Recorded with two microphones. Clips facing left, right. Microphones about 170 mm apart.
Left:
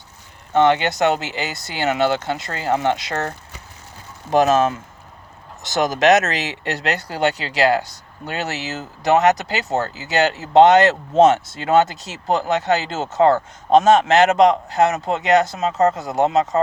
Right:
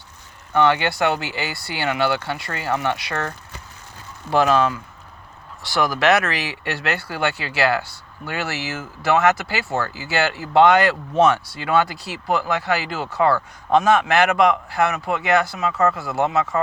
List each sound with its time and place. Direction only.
0.5 s speech: 20° left (ahead or behind)
4.3 s speech: 20° left (ahead or behind)